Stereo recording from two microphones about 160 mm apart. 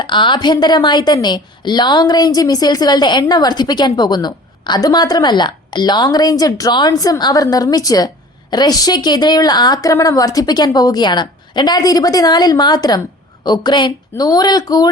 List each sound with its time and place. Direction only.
0.0 s a woman's voice: 30° left (ahead or behind)